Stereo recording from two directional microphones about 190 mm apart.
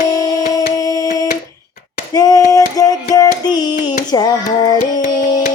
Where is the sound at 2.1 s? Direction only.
20° left (ahead or behind).